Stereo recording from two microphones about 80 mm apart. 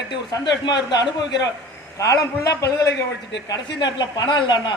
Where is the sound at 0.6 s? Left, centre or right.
Left.